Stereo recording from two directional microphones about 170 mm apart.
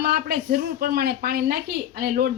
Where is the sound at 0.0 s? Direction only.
60° right (ahead or behind).